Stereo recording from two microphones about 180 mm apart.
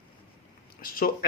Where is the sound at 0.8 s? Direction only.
55° left (ahead or behind).